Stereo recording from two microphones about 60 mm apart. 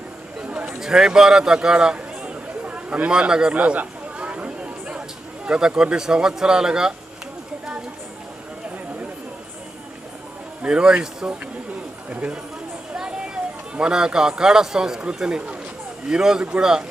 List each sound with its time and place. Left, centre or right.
0.3 s chatter: centre
0.8 s speech: centre
3.5 s a sound: right
5.5 s speech: centre
10.6 s speech: centre